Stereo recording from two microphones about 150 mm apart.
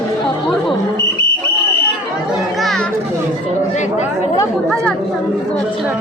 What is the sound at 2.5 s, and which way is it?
Children playing, centre (ahead or behind).